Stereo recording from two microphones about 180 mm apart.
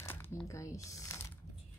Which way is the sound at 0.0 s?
15° left (ahead or behind).